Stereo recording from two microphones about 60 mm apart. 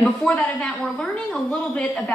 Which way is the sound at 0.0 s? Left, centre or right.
Centre.